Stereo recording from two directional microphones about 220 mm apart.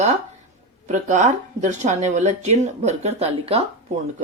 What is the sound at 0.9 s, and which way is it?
Speech, 30° right (ahead or behind).